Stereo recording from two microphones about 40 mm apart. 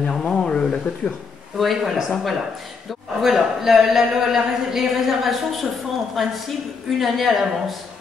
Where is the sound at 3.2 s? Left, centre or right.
Centre.